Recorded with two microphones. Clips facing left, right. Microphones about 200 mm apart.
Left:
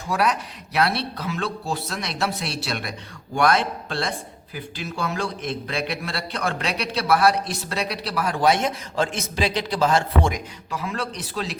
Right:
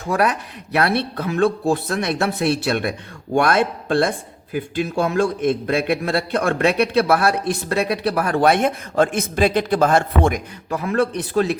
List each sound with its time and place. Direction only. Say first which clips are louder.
0.1 s a man's voice: right 3 dB; 55° right (ahead or behind)